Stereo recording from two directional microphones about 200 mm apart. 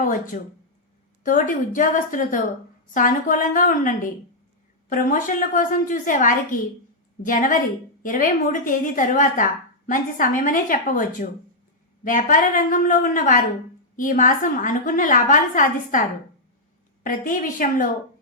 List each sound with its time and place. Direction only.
0.3 s a woman's voice: 40° left (ahead or behind)